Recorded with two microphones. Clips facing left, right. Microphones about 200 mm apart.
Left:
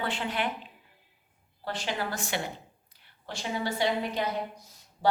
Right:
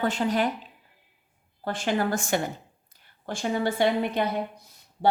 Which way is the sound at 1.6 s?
50° right (ahead or behind).